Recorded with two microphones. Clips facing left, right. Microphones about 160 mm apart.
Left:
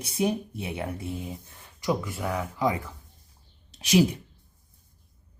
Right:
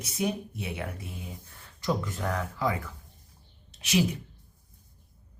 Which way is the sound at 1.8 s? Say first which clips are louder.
Left 2 dB; 10° left (ahead or behind).